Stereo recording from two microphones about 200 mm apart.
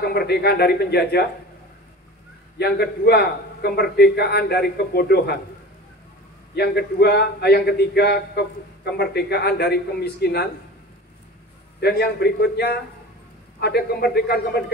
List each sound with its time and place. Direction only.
0.0 s a man's voice: 55° left (ahead or behind)
2.6 s a man's voice: 55° left (ahead or behind)
6.5 s a man's voice: 55° left (ahead or behind)
11.8 s a man's voice: 55° left (ahead or behind)